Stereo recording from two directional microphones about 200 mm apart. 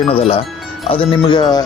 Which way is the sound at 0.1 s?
30° left (ahead or behind).